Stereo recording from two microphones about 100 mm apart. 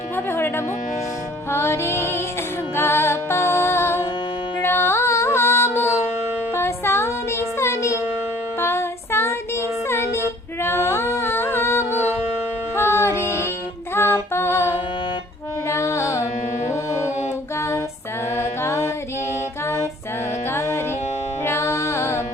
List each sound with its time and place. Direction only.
0.3 s speech: 25° left (ahead or behind)
1.5 s music: 25° left (ahead or behind)
8.6 s child singing: 25° left (ahead or behind)
12.7 s music: 25° left (ahead or behind)
13.9 s female singing: 25° left (ahead or behind)
15.7 s carnatic music: 30° left (ahead or behind)
17.6 s female singing: 30° left (ahead or behind)
18.3 s music: 30° left (ahead or behind)